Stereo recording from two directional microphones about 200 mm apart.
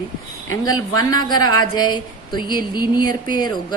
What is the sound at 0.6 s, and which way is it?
Speech, 20° left (ahead or behind).